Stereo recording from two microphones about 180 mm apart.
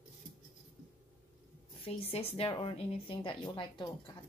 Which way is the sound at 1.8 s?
35° left (ahead or behind).